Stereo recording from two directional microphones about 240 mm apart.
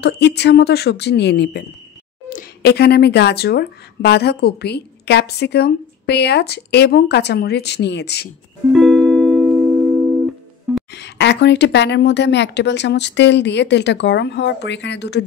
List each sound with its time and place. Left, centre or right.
0.0 s speech: left
8.7 s music: centre
10.9 s speech: left